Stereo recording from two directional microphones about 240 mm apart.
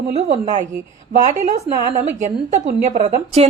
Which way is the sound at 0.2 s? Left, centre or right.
Right.